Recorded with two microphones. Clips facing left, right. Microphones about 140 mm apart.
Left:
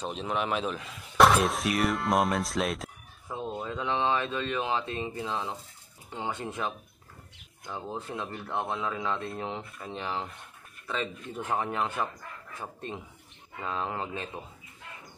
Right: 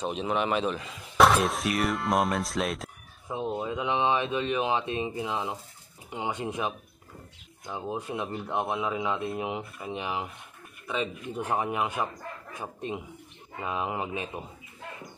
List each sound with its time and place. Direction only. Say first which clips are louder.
0.0 s speech: right 3 dB; 5° right (ahead or behind)
3.3 s speech: right 4 dB; 20° right (ahead or behind)